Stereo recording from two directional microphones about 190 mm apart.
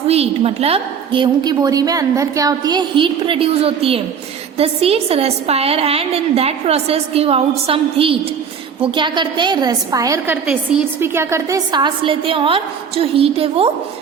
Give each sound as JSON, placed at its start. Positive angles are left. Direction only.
{"t": 0.1, "sound": "a woman's voice", "side_deg": -30}
{"t": 10.4, "sound": "a woman's voice", "side_deg": -5}